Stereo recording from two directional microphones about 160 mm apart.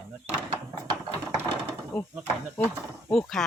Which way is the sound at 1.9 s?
Centre (ahead or behind).